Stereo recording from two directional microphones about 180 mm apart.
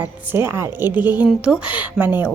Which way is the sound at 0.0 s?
10° right (ahead or behind).